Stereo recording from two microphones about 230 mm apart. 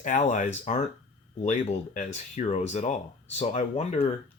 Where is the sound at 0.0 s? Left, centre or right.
Left.